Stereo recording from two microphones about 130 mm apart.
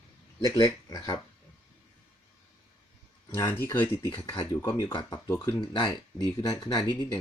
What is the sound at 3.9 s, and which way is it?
Speech, 40° left (ahead or behind).